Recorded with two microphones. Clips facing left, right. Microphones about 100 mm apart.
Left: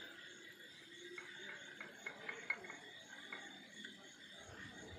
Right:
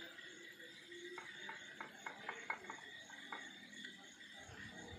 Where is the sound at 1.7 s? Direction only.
30° right (ahead or behind).